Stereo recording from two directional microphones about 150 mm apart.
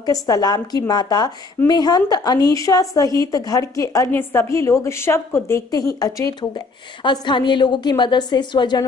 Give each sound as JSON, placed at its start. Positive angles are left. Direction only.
{"t": 0.0, "sound": "a woman's voice", "side_deg": 25}